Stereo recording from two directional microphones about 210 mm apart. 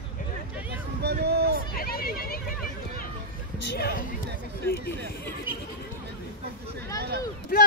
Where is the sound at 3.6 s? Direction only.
50° left (ahead or behind).